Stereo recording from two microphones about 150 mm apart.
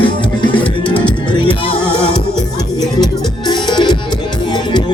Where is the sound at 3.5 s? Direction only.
30° left (ahead or behind).